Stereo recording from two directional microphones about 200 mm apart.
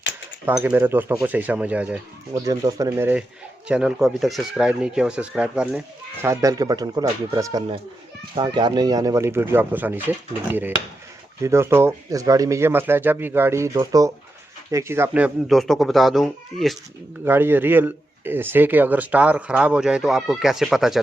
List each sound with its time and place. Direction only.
0.4 s a man's voice: 10° right (ahead or behind)
6.2 s a man's voice: 15° right (ahead or behind); by 16.7 s centre (ahead or behind)
17.2 s a man's voice: 10° right (ahead or behind)